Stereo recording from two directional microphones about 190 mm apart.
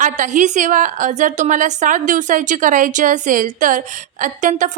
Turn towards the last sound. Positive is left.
turn(degrees=-40)  # may be behind; listen again after turning